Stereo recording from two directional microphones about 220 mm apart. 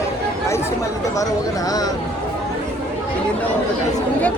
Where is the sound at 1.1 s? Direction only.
15° left (ahead or behind).